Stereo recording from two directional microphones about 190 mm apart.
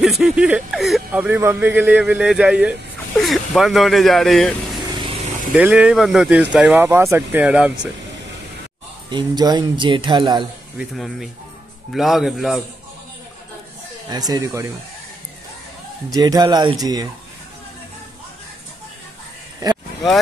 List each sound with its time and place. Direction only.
0.0 s speech: centre (ahead or behind)
9.1 s speech: 20° right (ahead or behind)
10.8 s speech: centre (ahead or behind)
14.1 s speech: 20° right (ahead or behind)
16.1 s speech: 20° right (ahead or behind)